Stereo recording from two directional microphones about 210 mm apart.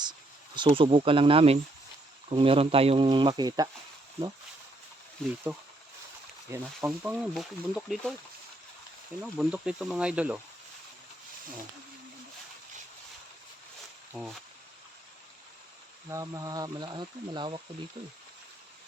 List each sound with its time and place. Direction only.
0.0 s speech: 20° right (ahead or behind)
6.5 s speech: 10° right (ahead or behind)
9.4 s speech: 5° right (ahead or behind)
14.1 s speech: centre (ahead or behind)
16.0 s speech: 15° right (ahead or behind)